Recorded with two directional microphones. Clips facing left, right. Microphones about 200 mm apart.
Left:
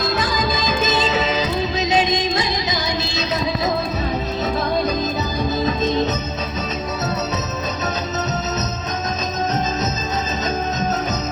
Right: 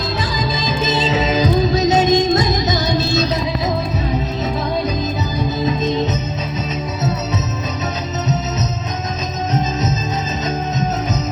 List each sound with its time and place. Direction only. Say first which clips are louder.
0.2 s music: even; 30° right (ahead or behind)